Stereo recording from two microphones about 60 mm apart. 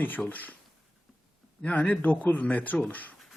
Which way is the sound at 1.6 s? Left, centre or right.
Left.